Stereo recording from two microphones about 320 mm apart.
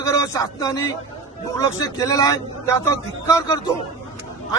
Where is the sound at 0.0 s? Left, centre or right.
Centre.